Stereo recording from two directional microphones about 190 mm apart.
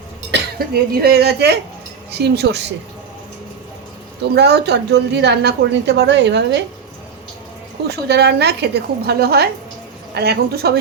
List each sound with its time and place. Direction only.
0.3 s a woman's voice: 60° right (ahead or behind)
4.2 s a woman's voice: 60° right (ahead or behind)
7.9 s a woman's voice: 60° right (ahead or behind)